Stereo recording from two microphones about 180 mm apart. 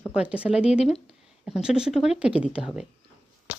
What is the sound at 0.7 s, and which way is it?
Speech, 35° left (ahead or behind).